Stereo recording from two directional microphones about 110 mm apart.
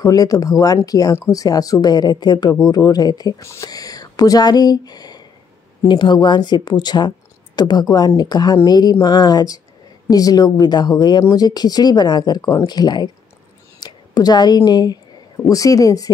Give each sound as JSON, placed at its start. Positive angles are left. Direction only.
{"t": 0.0, "sound": "a woman's voice", "side_deg": 35}